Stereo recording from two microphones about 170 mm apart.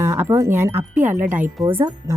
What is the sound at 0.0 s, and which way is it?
Speech, 15° right (ahead or behind).